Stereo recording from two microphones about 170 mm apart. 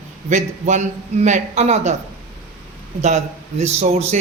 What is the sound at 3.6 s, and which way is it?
Speech, 40° right (ahead or behind).